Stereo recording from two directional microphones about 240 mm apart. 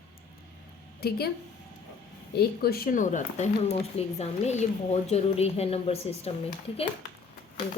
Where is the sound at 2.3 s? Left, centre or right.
Left.